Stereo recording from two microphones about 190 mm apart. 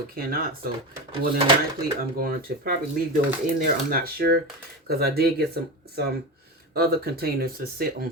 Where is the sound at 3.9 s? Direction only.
50° right (ahead or behind).